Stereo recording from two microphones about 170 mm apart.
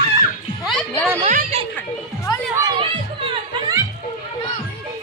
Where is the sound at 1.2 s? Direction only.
40° right (ahead or behind).